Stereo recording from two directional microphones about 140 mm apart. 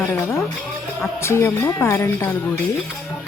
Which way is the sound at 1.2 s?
20° left (ahead or behind).